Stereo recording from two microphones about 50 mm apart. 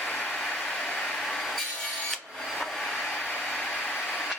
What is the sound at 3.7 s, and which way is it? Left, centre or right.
Printer, left.